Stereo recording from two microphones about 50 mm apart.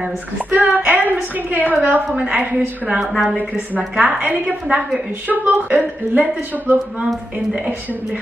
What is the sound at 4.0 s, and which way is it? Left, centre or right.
A woman's voice, right.